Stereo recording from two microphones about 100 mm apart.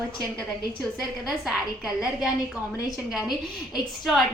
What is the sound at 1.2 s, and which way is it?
A woman's voice, 5° right (ahead or behind).